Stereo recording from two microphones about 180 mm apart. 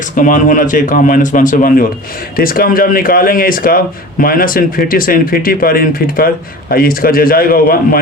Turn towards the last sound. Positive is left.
turn(degrees=55)  # may be behind; listen again after turning